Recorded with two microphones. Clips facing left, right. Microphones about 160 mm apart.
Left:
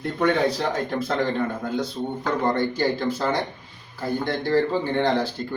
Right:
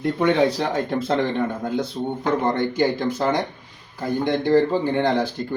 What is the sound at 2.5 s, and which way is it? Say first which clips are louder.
Speech: right 2 dB; 15° right (ahead or behind).